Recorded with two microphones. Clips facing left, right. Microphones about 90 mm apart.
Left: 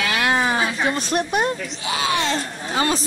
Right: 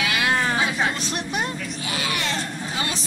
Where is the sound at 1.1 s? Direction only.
50° left (ahead or behind).